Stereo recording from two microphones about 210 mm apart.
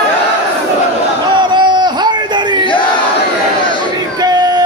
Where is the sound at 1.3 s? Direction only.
20° right (ahead or behind).